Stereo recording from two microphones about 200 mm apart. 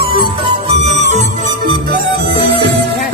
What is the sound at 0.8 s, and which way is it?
Music, 35° right (ahead or behind).